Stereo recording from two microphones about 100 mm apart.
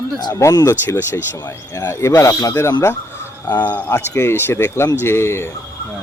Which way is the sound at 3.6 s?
15° left (ahead or behind).